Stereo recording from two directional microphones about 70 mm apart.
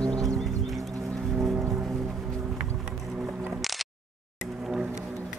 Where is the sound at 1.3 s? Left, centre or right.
Centre.